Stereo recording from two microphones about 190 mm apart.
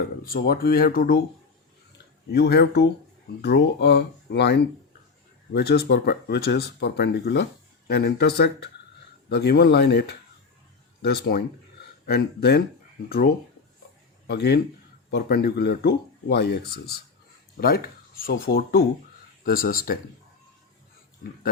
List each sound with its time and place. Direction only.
0.3 s speech: 55° left (ahead or behind)
2.3 s speech: 60° left (ahead or behind)